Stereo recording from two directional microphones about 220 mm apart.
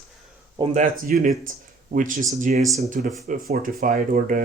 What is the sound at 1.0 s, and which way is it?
Speech, 40° right (ahead or behind).